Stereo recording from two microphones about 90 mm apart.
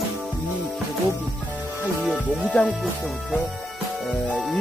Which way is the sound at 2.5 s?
10° left (ahead or behind).